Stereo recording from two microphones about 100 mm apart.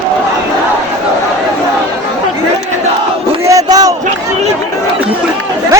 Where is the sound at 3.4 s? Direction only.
35° right (ahead or behind).